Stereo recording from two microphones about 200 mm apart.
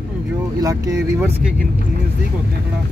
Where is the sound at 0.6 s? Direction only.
15° right (ahead or behind).